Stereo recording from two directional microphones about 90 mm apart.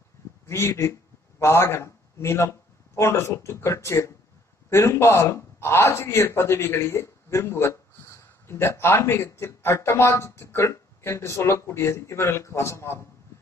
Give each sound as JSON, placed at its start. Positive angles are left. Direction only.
{"t": 0.5, "sound": "a man's voice", "side_deg": 30}